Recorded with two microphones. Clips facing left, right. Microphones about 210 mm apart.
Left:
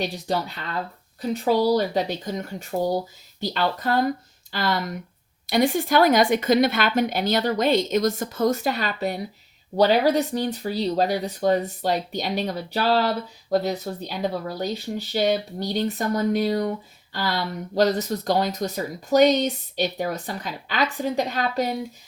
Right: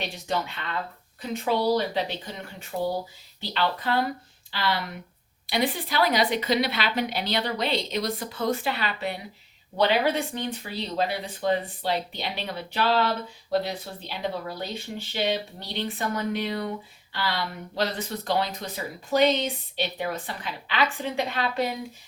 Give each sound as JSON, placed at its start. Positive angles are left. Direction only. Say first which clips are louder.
{"t": 0.0, "sound": "speech", "louder": "left 4 dB", "side_deg": 35}